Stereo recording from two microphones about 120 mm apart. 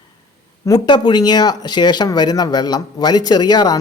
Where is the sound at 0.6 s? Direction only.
35° left (ahead or behind).